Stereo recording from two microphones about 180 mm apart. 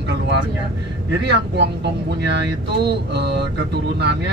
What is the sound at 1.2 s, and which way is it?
Speech, 70° right (ahead or behind).